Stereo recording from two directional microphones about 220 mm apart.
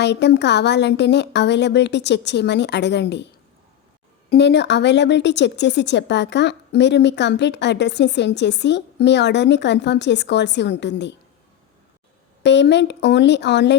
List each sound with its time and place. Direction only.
0.0 s speech: 50° left (ahead or behind)
4.3 s speech: 50° left (ahead or behind)
12.4 s speech: 50° left (ahead or behind)